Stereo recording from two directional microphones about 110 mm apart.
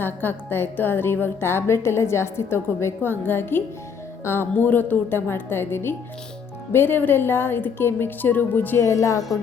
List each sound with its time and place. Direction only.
0.0 s a woman's voice: 20° left (ahead or behind)